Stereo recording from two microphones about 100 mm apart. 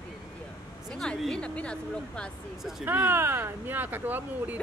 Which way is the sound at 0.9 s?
5° left (ahead or behind).